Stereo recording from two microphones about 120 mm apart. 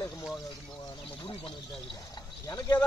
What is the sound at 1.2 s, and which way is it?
Speech, 45° left (ahead or behind).